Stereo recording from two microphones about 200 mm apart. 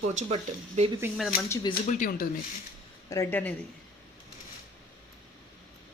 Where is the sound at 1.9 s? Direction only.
45° left (ahead or behind).